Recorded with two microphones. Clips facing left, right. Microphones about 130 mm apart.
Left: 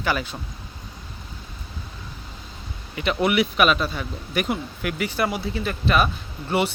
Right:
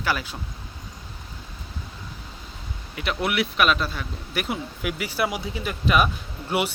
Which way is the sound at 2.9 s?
Centre (ahead or behind).